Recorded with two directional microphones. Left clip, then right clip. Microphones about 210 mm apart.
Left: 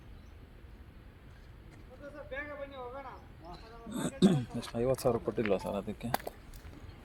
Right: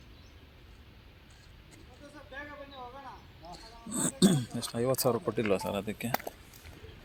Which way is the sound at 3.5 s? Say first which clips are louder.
Right 3 dB; 45° right (ahead or behind).